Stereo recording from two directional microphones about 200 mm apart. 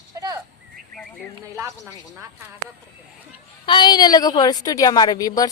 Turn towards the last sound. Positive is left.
turn(degrees=20)  # may be behind; listen again after turning